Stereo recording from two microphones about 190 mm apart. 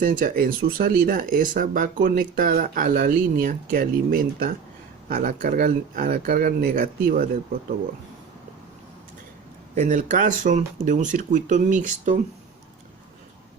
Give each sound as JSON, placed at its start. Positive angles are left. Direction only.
{"t": 0.0, "sound": "speech", "side_deg": -45}
{"t": 9.7, "sound": "speech", "side_deg": -40}